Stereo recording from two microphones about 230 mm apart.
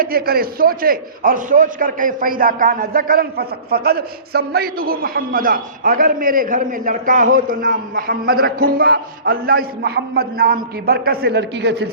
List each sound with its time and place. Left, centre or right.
0.0 s a man's voice: right